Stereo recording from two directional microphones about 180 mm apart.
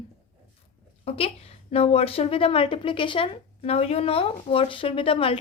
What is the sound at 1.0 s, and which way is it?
A woman's voice, 30° left (ahead or behind).